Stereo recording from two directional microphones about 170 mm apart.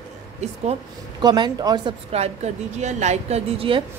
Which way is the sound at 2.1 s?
35° right (ahead or behind).